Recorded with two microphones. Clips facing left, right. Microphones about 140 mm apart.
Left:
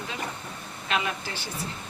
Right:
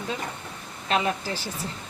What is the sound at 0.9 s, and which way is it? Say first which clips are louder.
Speech: right 4 dB; 35° right (ahead or behind).